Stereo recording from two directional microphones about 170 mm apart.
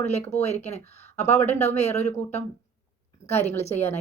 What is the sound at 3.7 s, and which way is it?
Speech, 15° left (ahead or behind).